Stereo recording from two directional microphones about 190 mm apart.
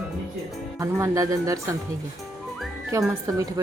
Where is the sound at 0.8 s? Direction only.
15° right (ahead or behind).